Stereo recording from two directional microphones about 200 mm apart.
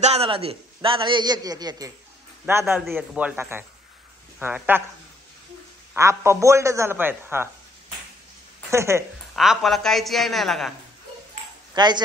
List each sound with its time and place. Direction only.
0.0 s a man's voice: 30° right (ahead or behind)
2.6 s a woman's voice: centre (ahead or behind)
5.9 s a man's voice: 15° right (ahead or behind)
8.6 s a woman's voice: 15° right (ahead or behind)
9.3 s a woman's voice: centre (ahead or behind)
11.7 s speech: 20° right (ahead or behind)